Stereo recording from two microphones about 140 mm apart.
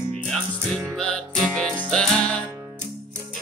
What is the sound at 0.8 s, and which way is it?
Music, 5° left (ahead or behind).